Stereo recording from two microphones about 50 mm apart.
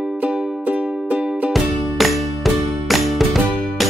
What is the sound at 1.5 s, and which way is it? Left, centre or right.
Music, centre.